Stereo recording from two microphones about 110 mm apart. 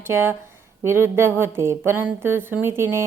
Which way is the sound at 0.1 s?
20° right (ahead or behind).